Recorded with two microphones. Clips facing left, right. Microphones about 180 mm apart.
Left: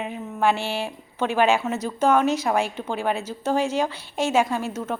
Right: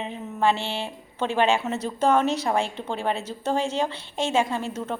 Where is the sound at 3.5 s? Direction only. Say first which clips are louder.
Left 2 dB; 25° right (ahead or behind).